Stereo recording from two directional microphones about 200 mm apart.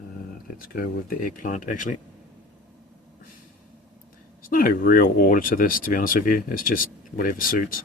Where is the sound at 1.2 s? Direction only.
40° left (ahead or behind).